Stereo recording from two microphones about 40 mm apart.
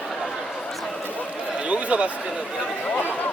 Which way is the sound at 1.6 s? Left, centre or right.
Right.